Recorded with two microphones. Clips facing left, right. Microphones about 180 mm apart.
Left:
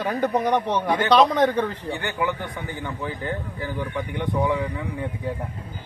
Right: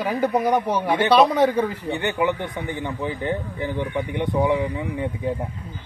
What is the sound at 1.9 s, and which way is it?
A man's voice, 20° right (ahead or behind).